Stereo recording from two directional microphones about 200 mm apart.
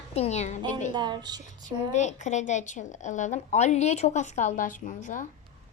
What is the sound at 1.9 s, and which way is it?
A woman's voice, 35° left (ahead or behind).